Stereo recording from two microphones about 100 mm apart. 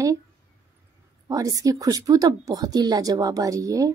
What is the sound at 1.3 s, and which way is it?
Speech, 35° right (ahead or behind).